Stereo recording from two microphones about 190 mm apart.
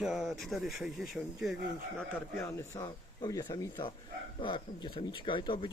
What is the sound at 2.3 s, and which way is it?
Speech, 15° left (ahead or behind).